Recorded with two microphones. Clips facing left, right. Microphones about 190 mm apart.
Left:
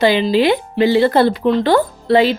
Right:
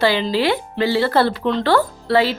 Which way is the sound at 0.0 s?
20° left (ahead or behind).